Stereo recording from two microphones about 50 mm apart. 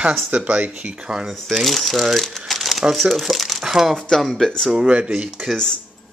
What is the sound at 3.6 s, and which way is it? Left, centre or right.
Speech, centre.